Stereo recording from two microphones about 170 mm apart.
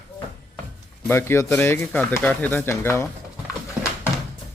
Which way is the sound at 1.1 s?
15° left (ahead or behind).